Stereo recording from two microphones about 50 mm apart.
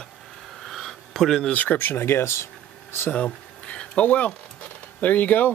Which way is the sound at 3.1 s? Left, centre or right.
Left.